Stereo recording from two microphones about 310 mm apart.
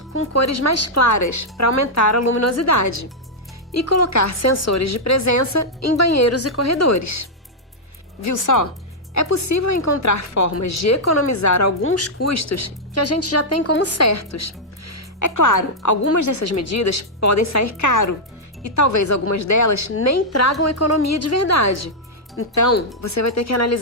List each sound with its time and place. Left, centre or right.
0.3 s speech: left
8.2 s speech: left
11.8 s a woman's voice: left